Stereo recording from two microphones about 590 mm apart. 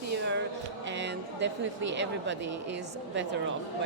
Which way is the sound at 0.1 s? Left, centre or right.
Centre.